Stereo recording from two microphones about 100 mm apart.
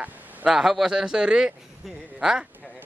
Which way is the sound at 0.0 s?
15° right (ahead or behind).